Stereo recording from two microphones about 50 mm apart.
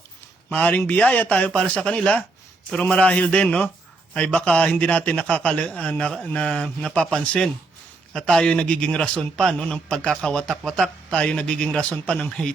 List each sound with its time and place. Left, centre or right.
0.5 s a man's voice: left
6.3 s a man's voice: left; by 10.9 s centre
11.1 s a man's voice: left